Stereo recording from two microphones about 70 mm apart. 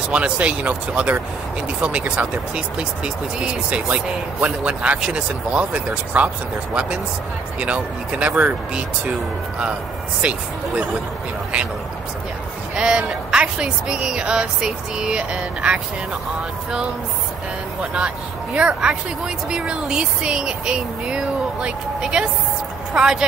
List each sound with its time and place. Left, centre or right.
0.1 s speech: centre
10.2 s speech: centre
12.7 s speech: centre
17.9 s speech: centre